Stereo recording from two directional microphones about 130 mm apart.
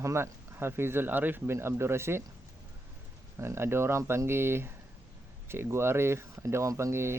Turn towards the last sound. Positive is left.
turn(degrees=-20)  # may be behind; listen again after turning